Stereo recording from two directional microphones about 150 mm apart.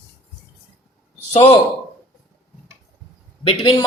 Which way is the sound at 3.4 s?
35° left (ahead or behind).